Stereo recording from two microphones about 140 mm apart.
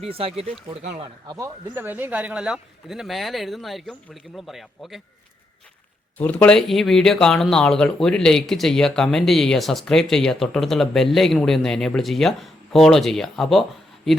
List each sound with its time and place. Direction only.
0.0 s speech: 45° right (ahead or behind)
1.7 s speech: 15° right (ahead or behind)
6.1 s speech: 10° left (ahead or behind)